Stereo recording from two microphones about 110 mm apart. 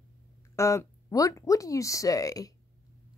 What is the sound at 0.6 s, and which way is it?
Speech, 30° left (ahead or behind).